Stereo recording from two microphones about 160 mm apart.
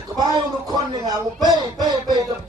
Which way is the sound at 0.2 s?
25° right (ahead or behind).